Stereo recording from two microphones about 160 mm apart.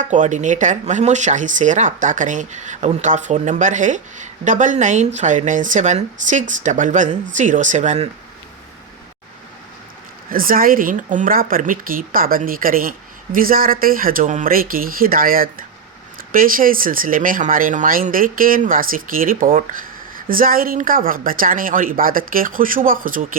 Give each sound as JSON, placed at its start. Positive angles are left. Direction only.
{"t": 0.0, "sound": "speech", "side_deg": -50}
{"t": 10.2, "sound": "speech", "side_deg": -60}